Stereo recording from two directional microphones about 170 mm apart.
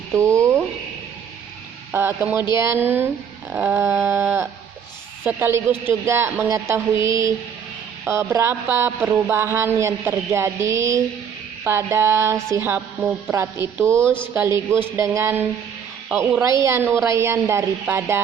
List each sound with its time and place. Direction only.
0.3 s a sound: 15° right (ahead or behind)
1.9 s speech: 15° right (ahead or behind)
7.0 s mantra: 20° right (ahead or behind)
8.0 s a woman's voice: 15° right (ahead or behind)
16.6 s speech: 15° right (ahead or behind)